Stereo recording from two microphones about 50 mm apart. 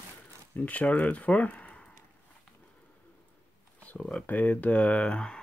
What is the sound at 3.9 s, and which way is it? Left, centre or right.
Speech, centre.